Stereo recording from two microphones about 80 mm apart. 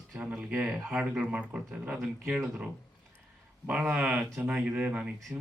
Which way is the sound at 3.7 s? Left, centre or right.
Centre.